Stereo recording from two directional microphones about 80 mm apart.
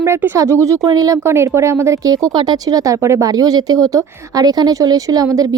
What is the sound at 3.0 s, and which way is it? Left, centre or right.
Speech, right.